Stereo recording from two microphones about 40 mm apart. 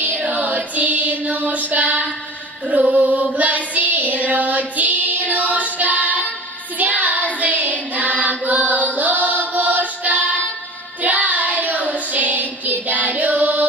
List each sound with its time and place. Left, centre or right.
0.0 s music: right
2.7 s female singing: right
6.8 s music: right
7.3 s singing: right
11.0 s child singing: right